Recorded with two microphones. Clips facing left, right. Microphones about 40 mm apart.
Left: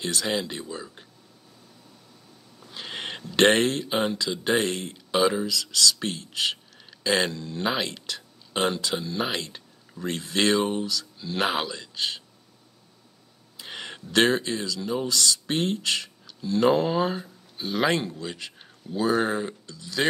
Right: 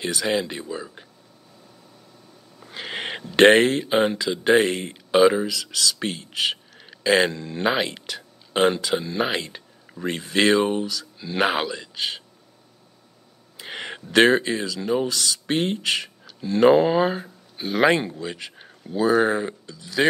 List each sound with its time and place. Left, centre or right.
0.0 s a man's voice: centre
2.6 s speech: right
13.6 s a man's voice: centre